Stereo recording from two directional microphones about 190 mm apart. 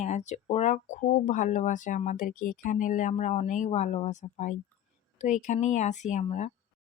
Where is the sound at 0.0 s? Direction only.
35° left (ahead or behind).